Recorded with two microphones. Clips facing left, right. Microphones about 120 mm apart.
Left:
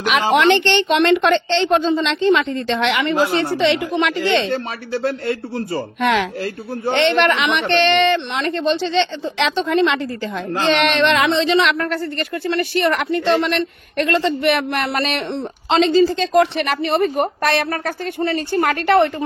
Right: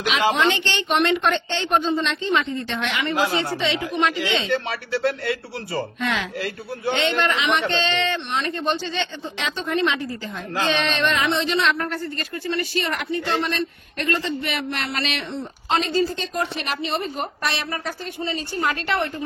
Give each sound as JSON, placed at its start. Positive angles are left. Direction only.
{"t": 0.0, "sound": "a woman's voice", "side_deg": 65}
{"t": 5.9, "sound": "speech", "side_deg": 65}
{"t": 10.7, "sound": "speech", "side_deg": 75}
{"t": 15.7, "sound": "a woman's voice", "side_deg": 90}
{"t": 16.8, "sound": "a woman's voice", "side_deg": 55}